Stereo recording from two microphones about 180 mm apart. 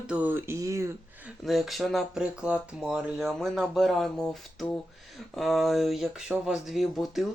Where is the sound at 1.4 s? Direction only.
Centre (ahead or behind).